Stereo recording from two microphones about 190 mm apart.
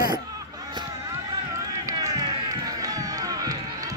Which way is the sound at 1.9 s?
20° right (ahead or behind).